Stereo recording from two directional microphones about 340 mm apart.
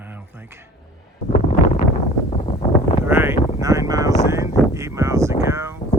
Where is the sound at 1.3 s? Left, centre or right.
Left.